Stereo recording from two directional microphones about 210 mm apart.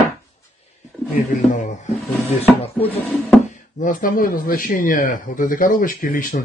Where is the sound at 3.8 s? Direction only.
40° left (ahead or behind).